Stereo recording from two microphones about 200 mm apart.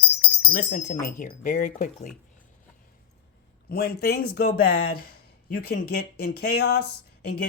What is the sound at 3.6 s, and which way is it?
Speech, 50° left (ahead or behind).